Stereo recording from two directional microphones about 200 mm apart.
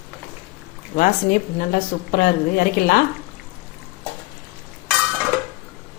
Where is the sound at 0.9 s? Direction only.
45° left (ahead or behind).